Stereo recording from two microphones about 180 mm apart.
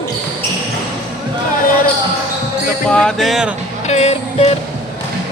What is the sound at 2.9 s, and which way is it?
Speech, 5° left (ahead or behind).